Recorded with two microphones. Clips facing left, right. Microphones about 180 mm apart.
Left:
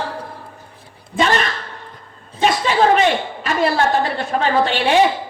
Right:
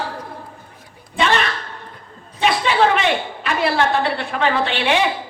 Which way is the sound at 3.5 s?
40° left (ahead or behind).